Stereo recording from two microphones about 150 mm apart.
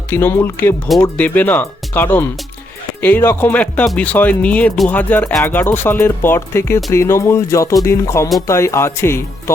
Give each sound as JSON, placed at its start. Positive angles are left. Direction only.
{"t": 0.1, "sound": "speech", "side_deg": 15}